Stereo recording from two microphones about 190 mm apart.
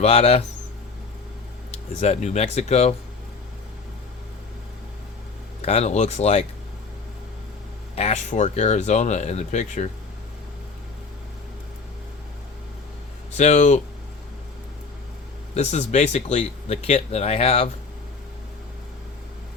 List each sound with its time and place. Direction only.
0.0 s speech: 30° left (ahead or behind)
1.7 s speech: 35° left (ahead or behind)
5.6 s speech: 35° left (ahead or behind)
7.9 s speech: 35° left (ahead or behind)
13.3 s speech: 40° left (ahead or behind)
15.5 s speech: 35° left (ahead or behind)